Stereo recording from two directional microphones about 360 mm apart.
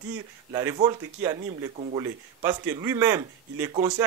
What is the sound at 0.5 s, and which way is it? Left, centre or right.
Speech, centre.